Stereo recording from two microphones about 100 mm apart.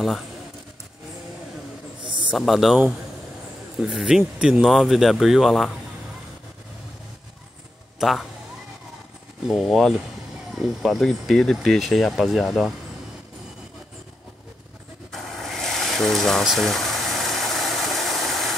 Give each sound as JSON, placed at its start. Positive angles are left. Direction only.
{"t": 2.0, "sound": "a sound", "side_deg": -50}
{"t": 2.3, "sound": "speech", "side_deg": 0}
{"t": 3.8, "sound": "speech", "side_deg": -5}
{"t": 8.0, "sound": "speech", "side_deg": 0}
{"t": 9.5, "sound": "speech", "side_deg": 0}
{"t": 15.0, "sound": "a sound", "side_deg": 0}